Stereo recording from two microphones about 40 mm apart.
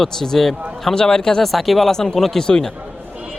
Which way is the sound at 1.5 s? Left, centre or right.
Centre.